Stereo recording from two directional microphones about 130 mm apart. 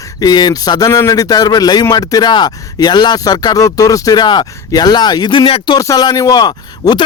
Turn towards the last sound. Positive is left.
turn(degrees=30)  # may be behind; listen again after turning